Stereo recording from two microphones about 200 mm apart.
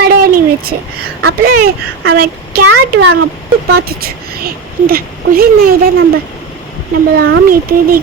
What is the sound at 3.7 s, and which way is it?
A woman's voice, 50° right (ahead or behind).